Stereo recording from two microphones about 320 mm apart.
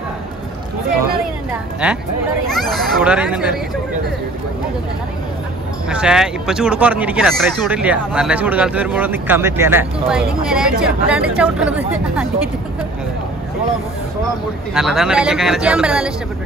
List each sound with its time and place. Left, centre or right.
1.8 s speech: centre
5.9 s speech: centre
14.7 s speech: centre